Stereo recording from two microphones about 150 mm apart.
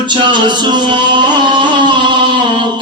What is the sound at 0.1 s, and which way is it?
Music, 30° right (ahead or behind).